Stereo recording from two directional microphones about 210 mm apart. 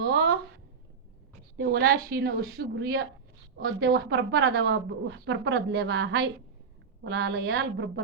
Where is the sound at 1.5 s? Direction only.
45° right (ahead or behind).